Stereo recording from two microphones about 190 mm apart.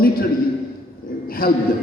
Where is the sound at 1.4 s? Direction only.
50° left (ahead or behind).